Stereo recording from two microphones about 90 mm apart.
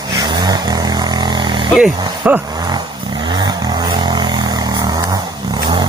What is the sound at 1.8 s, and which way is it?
Speech, 20° right (ahead or behind).